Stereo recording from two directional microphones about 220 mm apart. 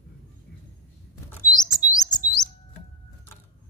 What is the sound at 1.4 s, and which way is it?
Chirp, 15° left (ahead or behind).